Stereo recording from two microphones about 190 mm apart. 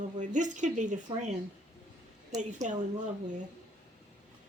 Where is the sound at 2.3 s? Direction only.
40° right (ahead or behind).